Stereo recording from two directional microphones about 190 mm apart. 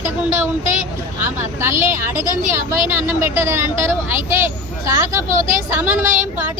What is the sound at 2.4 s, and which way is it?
Speech, 45° right (ahead or behind).